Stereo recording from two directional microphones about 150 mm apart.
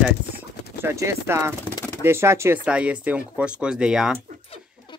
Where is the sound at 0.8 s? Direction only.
20° right (ahead or behind).